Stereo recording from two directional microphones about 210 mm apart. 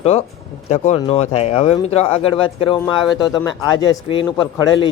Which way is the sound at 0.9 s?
30° left (ahead or behind).